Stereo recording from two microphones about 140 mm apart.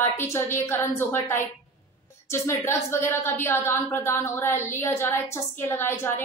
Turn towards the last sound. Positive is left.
turn(degrees=15)  # may be behind; listen again after turning